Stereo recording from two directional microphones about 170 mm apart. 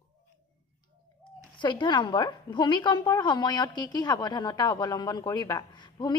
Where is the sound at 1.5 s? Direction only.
25° left (ahead or behind).